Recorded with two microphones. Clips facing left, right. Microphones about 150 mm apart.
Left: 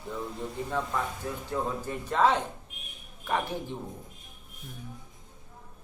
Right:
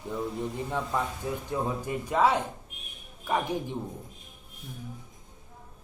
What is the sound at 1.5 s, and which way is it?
Speech, 15° right (ahead or behind).